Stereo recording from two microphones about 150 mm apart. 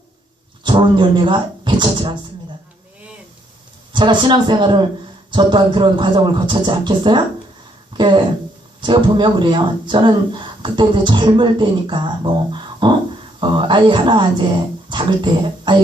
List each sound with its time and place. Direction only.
0.6 s speech: 30° right (ahead or behind)
3.9 s speech: 30° right (ahead or behind)